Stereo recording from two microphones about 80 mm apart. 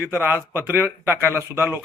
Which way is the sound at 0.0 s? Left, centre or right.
Right.